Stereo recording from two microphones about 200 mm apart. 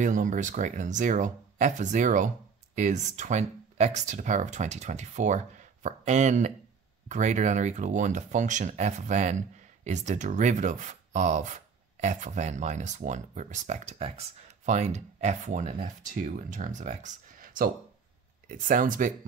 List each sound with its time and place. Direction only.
0.0 s speech: 40° right (ahead or behind)